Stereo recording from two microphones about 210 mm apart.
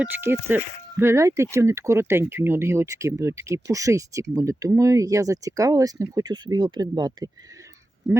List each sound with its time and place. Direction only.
0.0 s speech: 10° right (ahead or behind)